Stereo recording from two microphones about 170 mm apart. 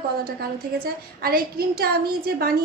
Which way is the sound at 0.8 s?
60° right (ahead or behind).